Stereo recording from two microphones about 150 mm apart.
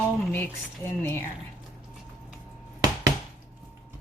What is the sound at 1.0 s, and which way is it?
Speech, 15° left (ahead or behind).